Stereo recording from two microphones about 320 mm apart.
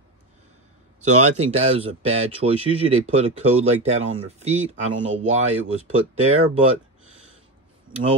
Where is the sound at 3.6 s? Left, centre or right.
Right.